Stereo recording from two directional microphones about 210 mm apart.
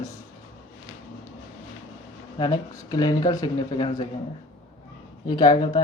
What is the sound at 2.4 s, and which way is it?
Speech, 20° left (ahead or behind).